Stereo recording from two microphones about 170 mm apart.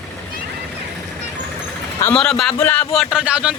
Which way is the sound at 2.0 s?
5° left (ahead or behind).